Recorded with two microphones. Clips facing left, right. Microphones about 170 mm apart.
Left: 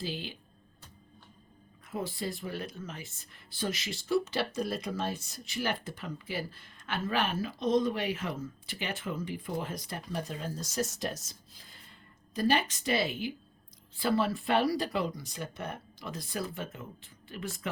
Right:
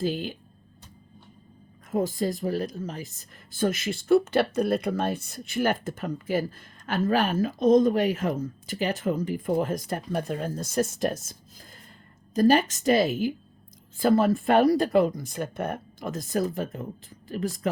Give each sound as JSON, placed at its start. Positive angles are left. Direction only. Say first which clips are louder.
{"t": 0.0, "sound": "speech", "louder": "right 10 dB", "side_deg": -45}
{"t": 1.9, "sound": "speech", "louder": "right 9 dB", "side_deg": -45}